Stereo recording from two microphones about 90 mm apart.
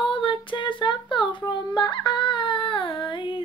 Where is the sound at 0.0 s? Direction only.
65° left (ahead or behind).